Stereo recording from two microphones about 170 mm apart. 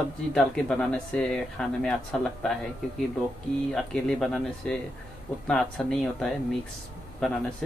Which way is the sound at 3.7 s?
5° left (ahead or behind).